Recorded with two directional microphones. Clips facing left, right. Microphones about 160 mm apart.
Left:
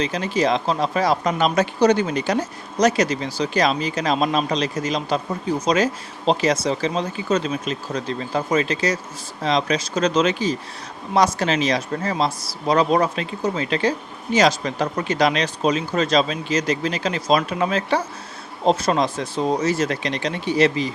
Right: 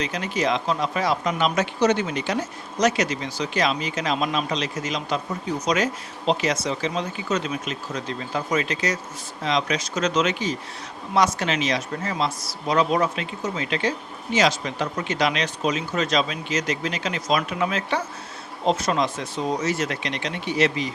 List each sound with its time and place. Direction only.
0.0 s speech: 30° left (ahead or behind)